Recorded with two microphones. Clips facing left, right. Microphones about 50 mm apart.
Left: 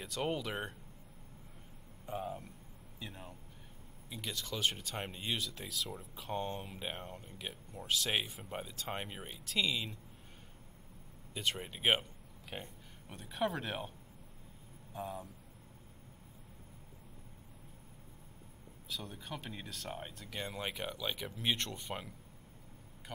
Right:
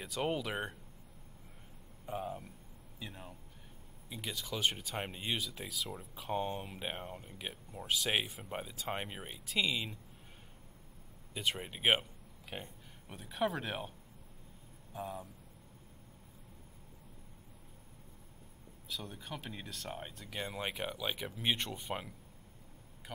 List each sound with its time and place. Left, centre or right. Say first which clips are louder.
0.0 s speech: right 1 dB; centre
2.0 s speech: even; centre
11.3 s speech: right 1 dB; centre
15.0 s speech: even; centre
18.9 s speech: even; centre